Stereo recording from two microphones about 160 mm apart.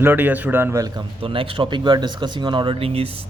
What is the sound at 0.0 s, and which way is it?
A man's voice, 10° right (ahead or behind).